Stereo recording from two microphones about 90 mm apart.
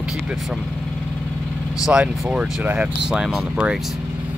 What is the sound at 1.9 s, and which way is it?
Speech, 10° right (ahead or behind).